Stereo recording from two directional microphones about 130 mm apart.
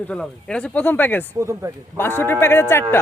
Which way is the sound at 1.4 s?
20° right (ahead or behind).